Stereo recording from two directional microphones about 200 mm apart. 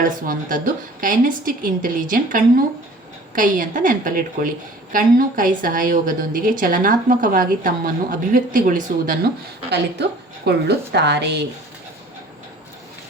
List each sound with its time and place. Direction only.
0.0 s a woman's voice: 45° right (ahead or behind)
9.7 s a woman's voice: 55° right (ahead or behind)